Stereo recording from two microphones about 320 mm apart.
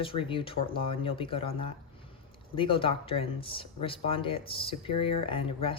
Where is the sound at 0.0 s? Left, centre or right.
Centre.